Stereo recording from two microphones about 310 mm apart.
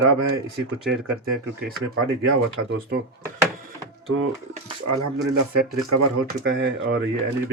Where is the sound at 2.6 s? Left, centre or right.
Right.